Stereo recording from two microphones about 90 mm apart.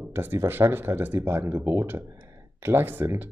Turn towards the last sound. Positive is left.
turn(degrees=-25)  # may be behind; listen again after turning